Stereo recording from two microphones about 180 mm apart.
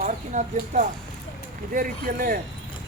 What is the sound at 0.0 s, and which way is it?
Speech, 45° right (ahead or behind).